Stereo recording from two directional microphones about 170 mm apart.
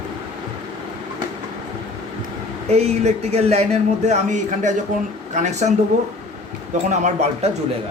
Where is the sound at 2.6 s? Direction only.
40° right (ahead or behind).